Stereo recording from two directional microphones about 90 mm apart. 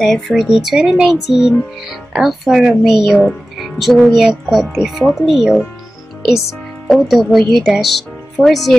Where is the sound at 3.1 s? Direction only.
10° left (ahead or behind).